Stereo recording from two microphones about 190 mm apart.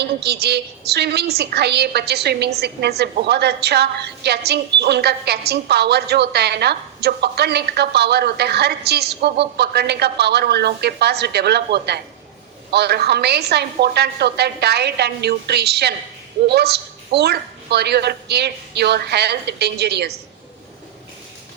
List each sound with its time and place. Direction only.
0.0 s a woman's voice: 60° right (ahead or behind)